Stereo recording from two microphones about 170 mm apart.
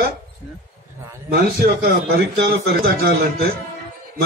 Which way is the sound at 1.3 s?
65° right (ahead or behind).